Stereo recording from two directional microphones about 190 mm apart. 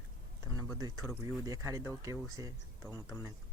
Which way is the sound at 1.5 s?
15° right (ahead or behind).